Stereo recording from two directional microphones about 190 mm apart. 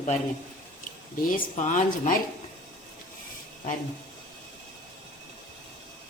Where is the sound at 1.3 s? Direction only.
40° left (ahead or behind).